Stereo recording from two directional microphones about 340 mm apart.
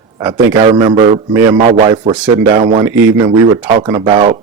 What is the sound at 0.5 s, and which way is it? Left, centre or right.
Speech, centre.